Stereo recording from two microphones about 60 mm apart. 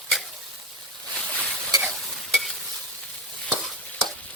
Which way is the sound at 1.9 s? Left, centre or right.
Centre.